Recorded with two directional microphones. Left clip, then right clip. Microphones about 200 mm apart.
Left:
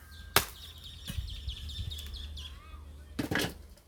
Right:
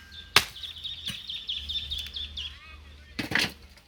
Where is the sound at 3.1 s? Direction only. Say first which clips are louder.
Right 6 dB; 35° left (ahead or behind).